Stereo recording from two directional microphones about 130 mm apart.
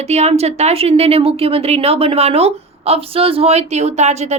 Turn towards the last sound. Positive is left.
turn(degrees=-60)  # may be behind; listen again after turning